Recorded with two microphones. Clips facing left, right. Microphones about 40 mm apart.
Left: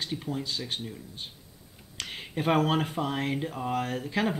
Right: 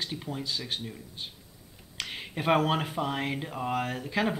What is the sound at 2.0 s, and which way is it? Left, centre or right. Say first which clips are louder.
Speech: left 1 dB; centre.